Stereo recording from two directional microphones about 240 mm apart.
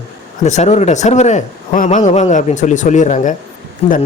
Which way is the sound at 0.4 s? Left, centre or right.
Left.